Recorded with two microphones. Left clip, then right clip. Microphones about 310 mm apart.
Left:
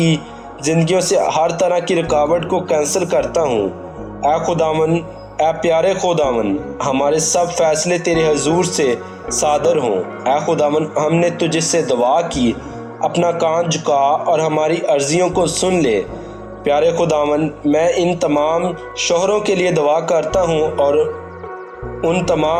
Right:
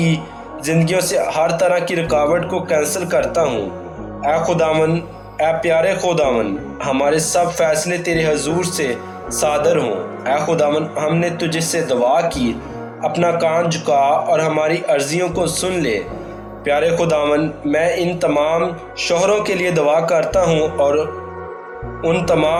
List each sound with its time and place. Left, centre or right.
0.6 s speech: left
22.0 s speech: left